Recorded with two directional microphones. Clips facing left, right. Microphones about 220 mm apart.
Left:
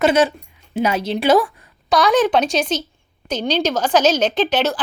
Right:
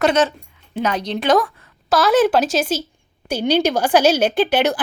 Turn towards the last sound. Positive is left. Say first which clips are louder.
# right 2 dB
turn(degrees=-10)  # may be behind; listen again after turning